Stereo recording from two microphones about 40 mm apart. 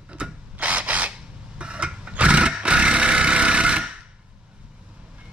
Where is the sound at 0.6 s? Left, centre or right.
Right.